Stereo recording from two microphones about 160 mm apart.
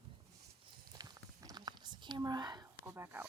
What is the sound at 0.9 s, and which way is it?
Whispering, 25° right (ahead or behind).